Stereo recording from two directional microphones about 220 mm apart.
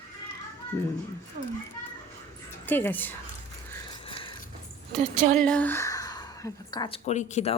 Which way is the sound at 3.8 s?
20° left (ahead or behind).